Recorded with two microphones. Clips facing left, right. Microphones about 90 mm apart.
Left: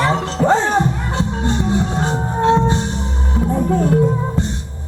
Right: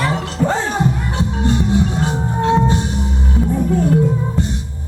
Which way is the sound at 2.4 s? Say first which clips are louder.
Left 1 dB; 30° left (ahead or behind).